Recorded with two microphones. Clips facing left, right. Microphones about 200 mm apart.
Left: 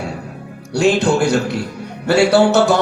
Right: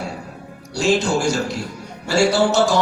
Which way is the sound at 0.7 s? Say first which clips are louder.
Left 4 dB; 60° left (ahead or behind).